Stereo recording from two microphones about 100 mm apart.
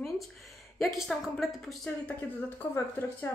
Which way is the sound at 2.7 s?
20° left (ahead or behind).